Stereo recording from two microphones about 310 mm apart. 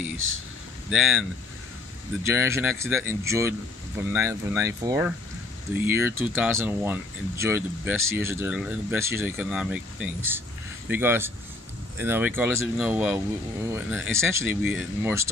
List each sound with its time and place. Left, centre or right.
0.8 s speech: centre
2.2 s speech: centre